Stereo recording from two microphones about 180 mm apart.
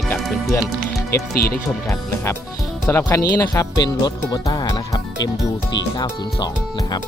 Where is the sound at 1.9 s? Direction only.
15° left (ahead or behind).